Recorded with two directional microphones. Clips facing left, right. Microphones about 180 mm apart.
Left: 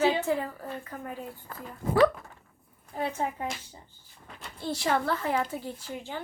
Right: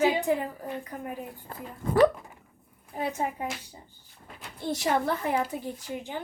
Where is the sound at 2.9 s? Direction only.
15° right (ahead or behind).